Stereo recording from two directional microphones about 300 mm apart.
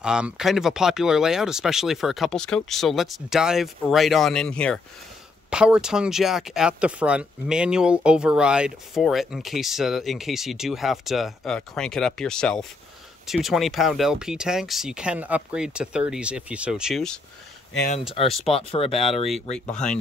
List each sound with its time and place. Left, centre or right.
0.0 s speech: centre
17.7 s speech: left